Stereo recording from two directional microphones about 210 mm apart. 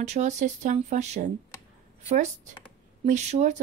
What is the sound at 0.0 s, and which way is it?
Speech, 35° right (ahead or behind).